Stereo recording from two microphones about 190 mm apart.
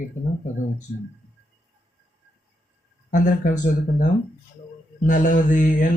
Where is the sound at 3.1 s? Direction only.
40° left (ahead or behind).